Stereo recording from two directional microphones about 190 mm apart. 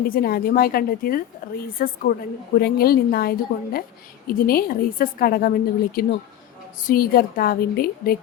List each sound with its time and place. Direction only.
0.1 s a woman's voice: 50° left (ahead or behind)